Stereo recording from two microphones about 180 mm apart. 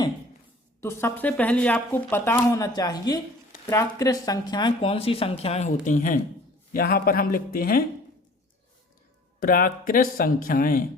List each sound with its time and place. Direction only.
0.8 s a man's voice: 15° left (ahead or behind); by 7.9 s 55° left (ahead or behind)
9.4 s speech: 55° left (ahead or behind)